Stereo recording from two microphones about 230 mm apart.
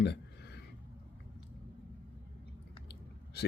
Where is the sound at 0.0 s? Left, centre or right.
Left.